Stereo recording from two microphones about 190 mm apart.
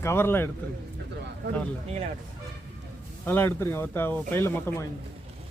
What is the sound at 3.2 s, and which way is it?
Speech, 10° left (ahead or behind).